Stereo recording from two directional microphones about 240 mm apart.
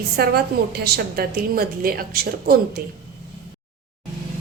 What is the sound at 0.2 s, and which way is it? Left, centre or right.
A woman's voice, right.